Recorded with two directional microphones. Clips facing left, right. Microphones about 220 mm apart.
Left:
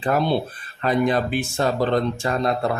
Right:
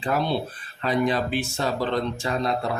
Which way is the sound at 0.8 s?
50° left (ahead or behind).